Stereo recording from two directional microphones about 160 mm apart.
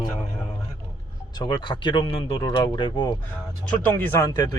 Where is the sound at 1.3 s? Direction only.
30° left (ahead or behind).